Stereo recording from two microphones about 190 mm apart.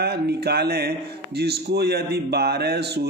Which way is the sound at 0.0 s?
55° right (ahead or behind).